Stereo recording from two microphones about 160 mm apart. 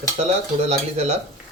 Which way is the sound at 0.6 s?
40° right (ahead or behind).